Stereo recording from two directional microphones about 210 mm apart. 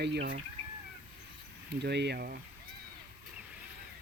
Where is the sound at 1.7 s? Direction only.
55° right (ahead or behind).